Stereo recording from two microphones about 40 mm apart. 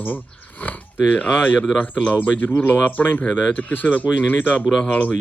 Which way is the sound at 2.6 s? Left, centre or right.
Left.